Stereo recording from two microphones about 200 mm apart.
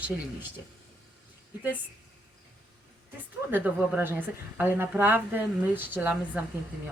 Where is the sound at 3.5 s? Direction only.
10° right (ahead or behind).